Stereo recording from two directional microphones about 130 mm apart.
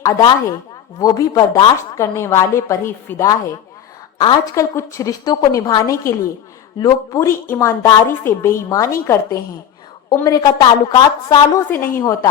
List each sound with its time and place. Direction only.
0.0 s a woman's voice: 30° left (ahead or behind)
2.0 s a woman's voice: 20° left (ahead or behind)
4.5 s a woman's voice: 20° left (ahead or behind)
11.7 s a woman's voice: 20° left (ahead or behind)